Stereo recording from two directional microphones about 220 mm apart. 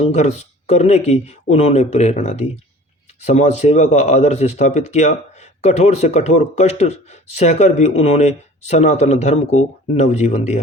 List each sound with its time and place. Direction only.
0.0 s speech: 30° left (ahead or behind)